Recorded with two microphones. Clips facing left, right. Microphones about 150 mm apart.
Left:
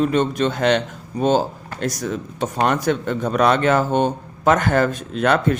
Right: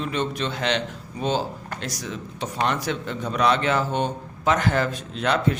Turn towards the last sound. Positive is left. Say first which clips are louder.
# left 5 dB
turn(degrees=50)  # may be behind; listen again after turning